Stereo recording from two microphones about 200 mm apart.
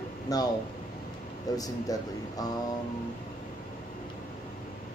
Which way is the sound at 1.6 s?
20° left (ahead or behind).